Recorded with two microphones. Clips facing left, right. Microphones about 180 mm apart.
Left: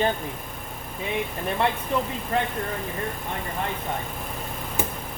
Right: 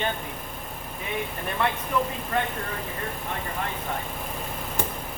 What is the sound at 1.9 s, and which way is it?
Speech, 25° left (ahead or behind).